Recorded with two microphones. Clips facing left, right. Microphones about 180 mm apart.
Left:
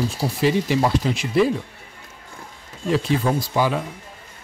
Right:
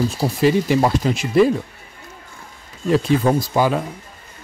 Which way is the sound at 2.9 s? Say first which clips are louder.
Right 4 dB; 45° right (ahead or behind).